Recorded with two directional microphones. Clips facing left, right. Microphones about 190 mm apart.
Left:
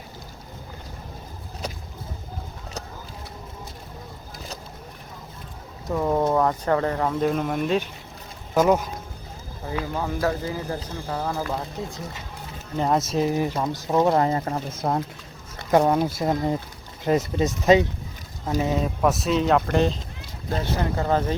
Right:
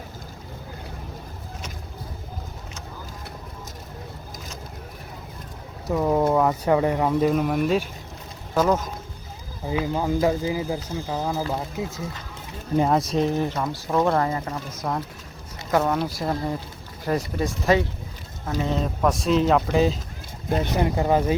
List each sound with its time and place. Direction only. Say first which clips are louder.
5.9 s speech: right 1 dB; 5° right (ahead or behind)
8.5 s speech: left 2 dB; 10° left (ahead or behind)
9.6 s speech: right 4 dB; 15° right (ahead or behind); by 13.5 s 5° left (ahead or behind)
13.6 s speech: left 1 dB; 20° left (ahead or behind)
14.3 s speech: left 3 dB; 35° left (ahead or behind); by 17.8 s 20° left (ahead or behind)
18.6 s speech: even; 5° left (ahead or behind)
20.5 s speech: right 3 dB; 15° right (ahead or behind)